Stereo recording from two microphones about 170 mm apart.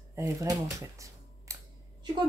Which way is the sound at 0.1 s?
20° right (ahead or behind).